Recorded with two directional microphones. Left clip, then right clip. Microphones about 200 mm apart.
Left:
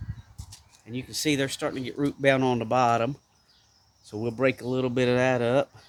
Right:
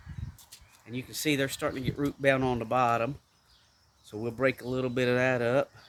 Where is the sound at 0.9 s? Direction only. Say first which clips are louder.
Left 3 dB; 25° left (ahead or behind).